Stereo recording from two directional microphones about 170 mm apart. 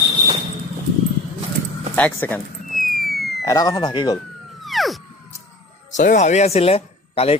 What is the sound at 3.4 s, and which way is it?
Speech, 20° left (ahead or behind).